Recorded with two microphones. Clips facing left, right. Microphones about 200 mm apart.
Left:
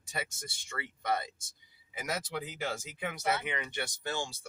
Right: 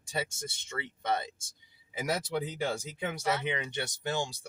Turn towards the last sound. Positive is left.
turn(degrees=-20)  # may be behind; listen again after turning